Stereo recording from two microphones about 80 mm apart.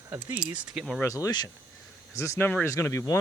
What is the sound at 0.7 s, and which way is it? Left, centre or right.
Speech, centre.